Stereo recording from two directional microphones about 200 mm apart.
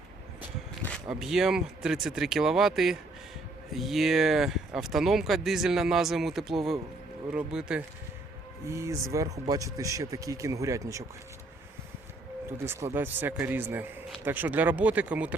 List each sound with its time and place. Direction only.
0.9 s speech: centre (ahead or behind)
8.6 s speech: 15° right (ahead or behind)
12.6 s speech: 15° right (ahead or behind)